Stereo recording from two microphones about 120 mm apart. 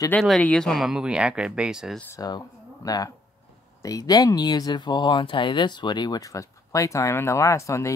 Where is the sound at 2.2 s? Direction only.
35° left (ahead or behind).